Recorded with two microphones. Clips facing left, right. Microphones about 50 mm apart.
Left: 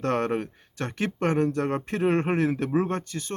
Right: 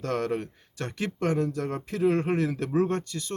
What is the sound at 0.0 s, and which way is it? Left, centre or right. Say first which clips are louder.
Speech: left 3 dB; left.